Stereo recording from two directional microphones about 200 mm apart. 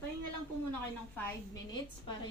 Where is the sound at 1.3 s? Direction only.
20° left (ahead or behind).